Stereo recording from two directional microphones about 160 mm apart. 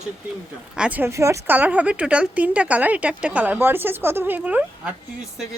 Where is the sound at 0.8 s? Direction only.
10° right (ahead or behind).